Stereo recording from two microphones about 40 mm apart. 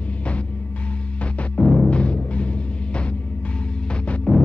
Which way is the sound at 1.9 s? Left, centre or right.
Left.